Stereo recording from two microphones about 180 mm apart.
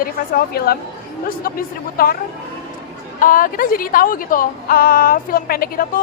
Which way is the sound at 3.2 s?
50° left (ahead or behind).